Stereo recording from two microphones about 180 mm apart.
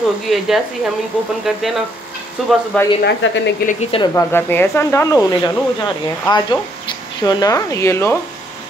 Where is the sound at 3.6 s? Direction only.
45° left (ahead or behind).